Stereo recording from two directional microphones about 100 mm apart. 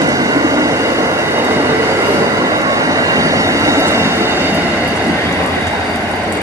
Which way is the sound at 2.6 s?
35° right (ahead or behind).